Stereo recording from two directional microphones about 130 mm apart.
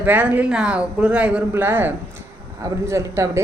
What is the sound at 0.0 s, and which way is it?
A woman's voice, 15° right (ahead or behind).